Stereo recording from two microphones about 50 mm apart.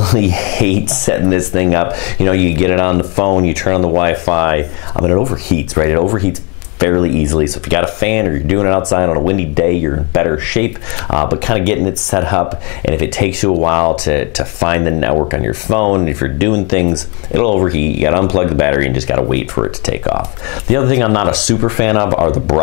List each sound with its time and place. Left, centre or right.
0.0 s speech: centre